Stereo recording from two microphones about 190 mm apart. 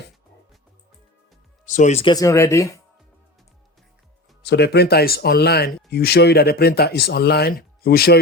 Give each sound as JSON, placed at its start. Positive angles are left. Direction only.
{"t": 1.6, "sound": "speech", "side_deg": 40}
{"t": 2.1, "sound": "speech", "side_deg": 15}
{"t": 4.4, "sound": "speech", "side_deg": 60}